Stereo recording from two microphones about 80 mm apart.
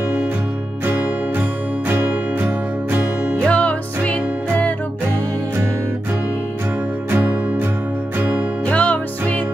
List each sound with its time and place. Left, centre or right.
1.9 s music: right
3.3 s music: centre
7.1 s music: right
8.6 s music: centre